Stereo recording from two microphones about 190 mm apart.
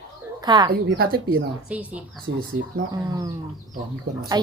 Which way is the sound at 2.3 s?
90° right.